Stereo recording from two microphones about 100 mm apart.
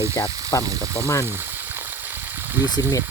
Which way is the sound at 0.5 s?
30° left (ahead or behind).